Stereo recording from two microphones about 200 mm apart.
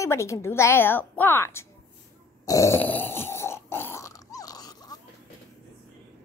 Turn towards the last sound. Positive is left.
turn(degrees=20)  # may be behind; listen again after turning